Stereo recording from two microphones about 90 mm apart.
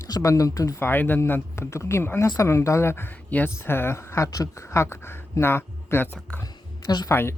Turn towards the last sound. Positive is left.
turn(degrees=30)  # may be behind; listen again after turning